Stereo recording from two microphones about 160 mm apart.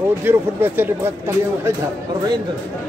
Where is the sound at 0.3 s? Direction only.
15° right (ahead or behind).